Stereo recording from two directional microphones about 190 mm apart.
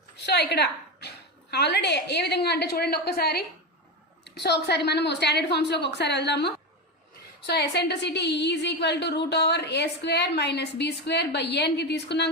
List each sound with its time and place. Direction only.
0.3 s a woman's voice: 60° left (ahead or behind)
4.4 s a woman's voice: 60° left (ahead or behind)